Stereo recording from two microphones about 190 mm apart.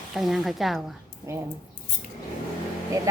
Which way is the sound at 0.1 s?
Centre (ahead or behind).